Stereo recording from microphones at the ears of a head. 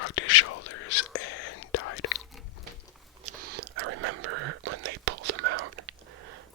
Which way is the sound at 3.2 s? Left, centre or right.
Right.